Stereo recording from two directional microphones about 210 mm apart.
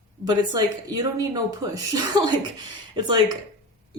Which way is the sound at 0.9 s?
20° right (ahead or behind).